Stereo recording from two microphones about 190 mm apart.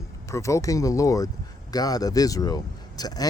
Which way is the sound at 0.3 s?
15° left (ahead or behind).